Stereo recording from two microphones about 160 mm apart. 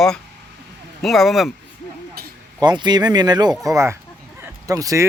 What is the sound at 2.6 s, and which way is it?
Speech, 25° right (ahead or behind).